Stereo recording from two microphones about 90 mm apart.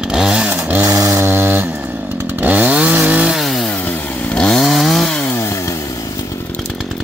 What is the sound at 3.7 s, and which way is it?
Chainsaw, 15° left (ahead or behind).